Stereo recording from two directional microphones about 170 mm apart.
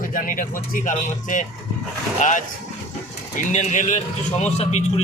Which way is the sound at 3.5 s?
45° left (ahead or behind).